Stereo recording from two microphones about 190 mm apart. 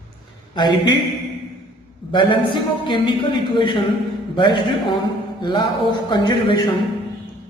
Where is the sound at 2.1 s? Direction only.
25° left (ahead or behind).